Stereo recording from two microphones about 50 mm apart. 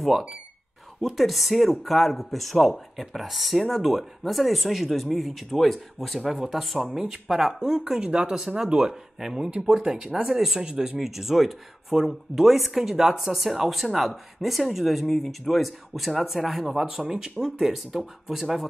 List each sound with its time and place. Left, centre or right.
1.0 s speech: centre
10.2 s speech: centre
10.6 s speech: centre
11.0 s speech: centre